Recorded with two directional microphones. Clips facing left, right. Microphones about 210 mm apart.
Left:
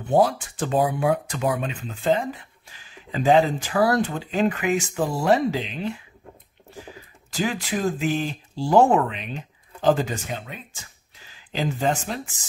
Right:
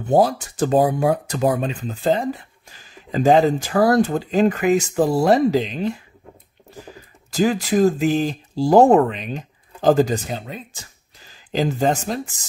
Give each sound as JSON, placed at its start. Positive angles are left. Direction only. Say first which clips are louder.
{"t": 0.0, "sound": "speech", "louder": "right 3 dB", "side_deg": -40}
{"t": 7.3, "sound": "speech", "louder": "right 8 dB", "side_deg": -40}